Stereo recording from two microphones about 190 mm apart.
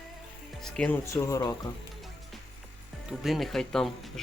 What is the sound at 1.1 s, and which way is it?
Speech, 15° left (ahead or behind).